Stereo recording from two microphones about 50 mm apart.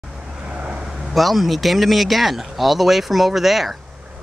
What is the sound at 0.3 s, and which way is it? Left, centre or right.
Vehicle, centre.